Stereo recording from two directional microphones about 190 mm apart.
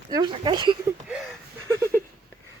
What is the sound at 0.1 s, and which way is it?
Speech, 25° right (ahead or behind).